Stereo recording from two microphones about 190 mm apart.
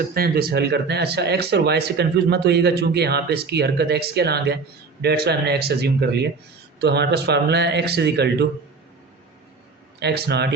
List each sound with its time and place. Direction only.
0.0 s speech: 55° right (ahead or behind)
10.0 s speech: 60° right (ahead or behind)